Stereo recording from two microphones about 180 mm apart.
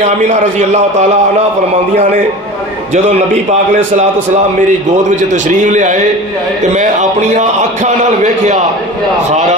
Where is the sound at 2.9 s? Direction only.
40° right (ahead or behind).